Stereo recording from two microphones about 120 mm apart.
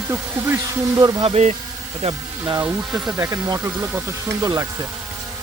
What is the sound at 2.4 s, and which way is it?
Speech, 30° right (ahead or behind).